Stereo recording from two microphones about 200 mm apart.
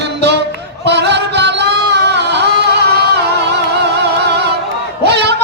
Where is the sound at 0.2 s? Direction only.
60° right (ahead or behind).